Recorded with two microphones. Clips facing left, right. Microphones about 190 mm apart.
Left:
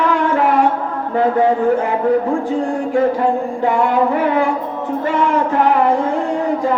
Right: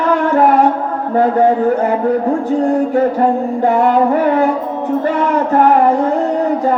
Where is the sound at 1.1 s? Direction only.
40° right (ahead or behind).